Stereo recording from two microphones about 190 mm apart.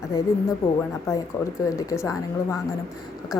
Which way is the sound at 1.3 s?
15° left (ahead or behind).